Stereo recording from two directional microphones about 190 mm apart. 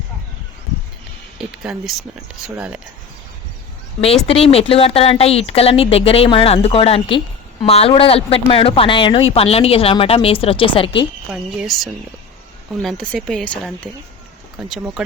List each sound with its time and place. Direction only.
1.4 s speech: 5° right (ahead or behind)
4.3 s speech: 30° left (ahead or behind)
11.3 s speech: centre (ahead or behind)